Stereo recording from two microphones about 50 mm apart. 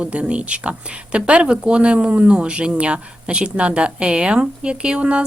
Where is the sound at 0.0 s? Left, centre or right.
Right.